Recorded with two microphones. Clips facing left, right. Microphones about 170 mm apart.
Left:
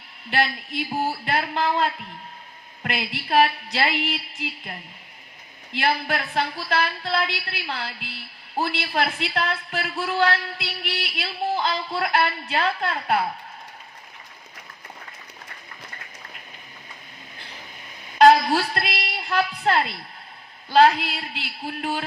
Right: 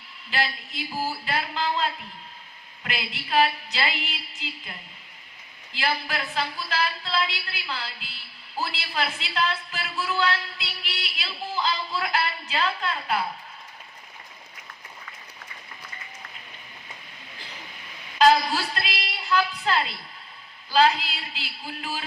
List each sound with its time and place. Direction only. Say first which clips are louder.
0.3 s a woman's voice: left 5 dB; 60° left (ahead or behind)
18.2 s a woman's voice: left 4 dB; 60° left (ahead or behind)